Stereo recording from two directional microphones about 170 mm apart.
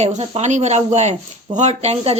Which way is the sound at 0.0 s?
40° right (ahead or behind).